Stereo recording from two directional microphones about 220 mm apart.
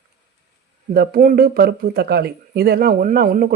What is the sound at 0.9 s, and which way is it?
Speech, 45° right (ahead or behind).